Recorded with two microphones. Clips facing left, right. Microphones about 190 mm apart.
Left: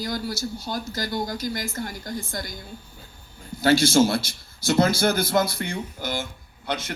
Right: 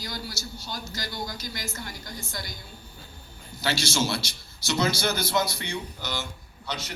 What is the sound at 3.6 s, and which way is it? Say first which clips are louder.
Speech: left 10 dB; 50° left (ahead or behind).